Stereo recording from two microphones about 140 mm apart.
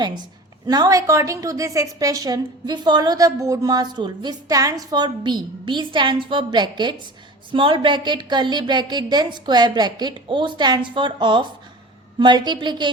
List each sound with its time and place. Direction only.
0.7 s a woman's voice: 25° right (ahead or behind)